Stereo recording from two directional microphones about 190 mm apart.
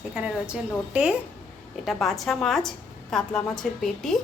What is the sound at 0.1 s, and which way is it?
Speech, 5° right (ahead or behind).